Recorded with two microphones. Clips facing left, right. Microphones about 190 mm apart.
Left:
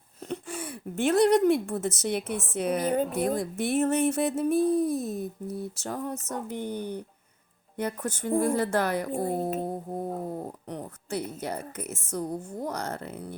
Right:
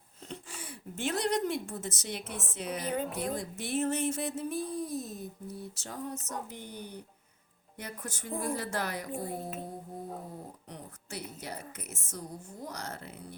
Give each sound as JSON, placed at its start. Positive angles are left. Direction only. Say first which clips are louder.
{"t": 0.3, "sound": "speech", "louder": "left 9 dB", "side_deg": 55}
{"t": 2.2, "sound": "a woman's voice", "louder": "left 8 dB", "side_deg": 0}
{"t": 2.6, "sound": "a woman's voice", "louder": "left 8 dB", "side_deg": 55}